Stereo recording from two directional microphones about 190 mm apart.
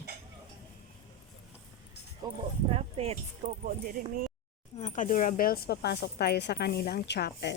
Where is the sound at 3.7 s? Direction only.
50° right (ahead or behind).